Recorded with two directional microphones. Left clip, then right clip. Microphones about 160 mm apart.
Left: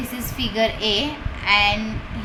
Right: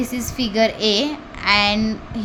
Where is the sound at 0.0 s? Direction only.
90° right.